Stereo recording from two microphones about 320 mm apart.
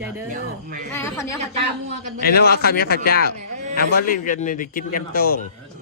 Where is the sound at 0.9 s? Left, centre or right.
Centre.